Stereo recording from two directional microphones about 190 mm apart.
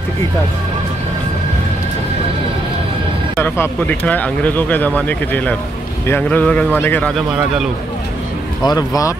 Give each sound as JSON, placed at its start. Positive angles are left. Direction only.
{"t": 3.3, "sound": "speech", "side_deg": 10}
{"t": 8.6, "sound": "speech", "side_deg": 20}